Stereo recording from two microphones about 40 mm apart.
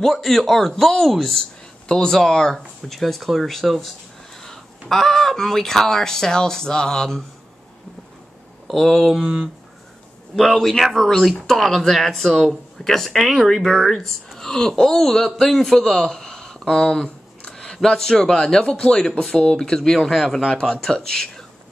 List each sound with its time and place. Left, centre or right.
0.0 s speech: centre
8.6 s speech: centre
10.3 s speech: centre
13.1 s a man's voice: centre
20.1 s speech: centre
20.4 s speech: centre